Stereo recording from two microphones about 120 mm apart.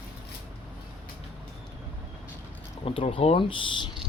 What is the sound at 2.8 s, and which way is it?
Speech, 50° left (ahead or behind).